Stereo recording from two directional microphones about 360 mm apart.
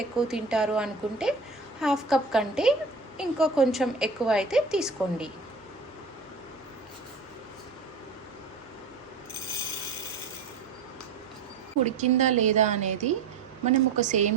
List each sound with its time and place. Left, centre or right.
0.0 s a woman's voice: centre
11.9 s a woman's voice: centre